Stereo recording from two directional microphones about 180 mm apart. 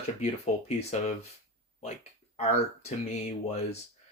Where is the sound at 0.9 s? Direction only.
40° left (ahead or behind).